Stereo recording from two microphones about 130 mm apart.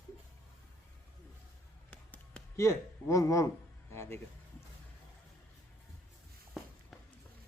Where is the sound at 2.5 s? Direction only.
20° left (ahead or behind).